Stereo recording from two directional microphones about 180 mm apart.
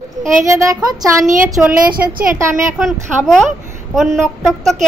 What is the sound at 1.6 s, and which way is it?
Speech, 5° right (ahead or behind).